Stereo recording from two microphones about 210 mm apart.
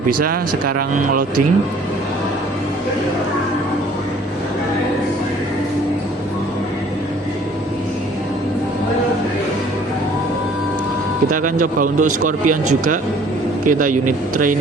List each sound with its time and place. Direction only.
11.6 s speech: 40° right (ahead or behind)